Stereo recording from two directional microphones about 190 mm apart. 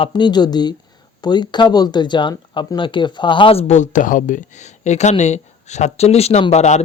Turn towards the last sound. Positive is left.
turn(degrees=35)  # may be behind; listen again after turning